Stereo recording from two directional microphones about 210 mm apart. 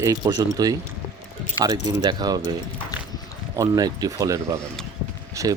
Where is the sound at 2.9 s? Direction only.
20° left (ahead or behind).